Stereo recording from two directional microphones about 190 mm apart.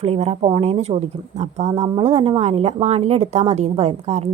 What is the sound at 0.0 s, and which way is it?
Speech, 30° right (ahead or behind).